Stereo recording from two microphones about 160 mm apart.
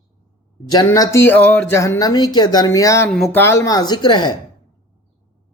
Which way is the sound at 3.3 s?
15° left (ahead or behind).